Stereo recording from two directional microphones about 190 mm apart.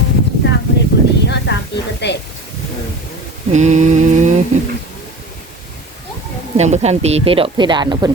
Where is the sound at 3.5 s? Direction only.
40° right (ahead or behind).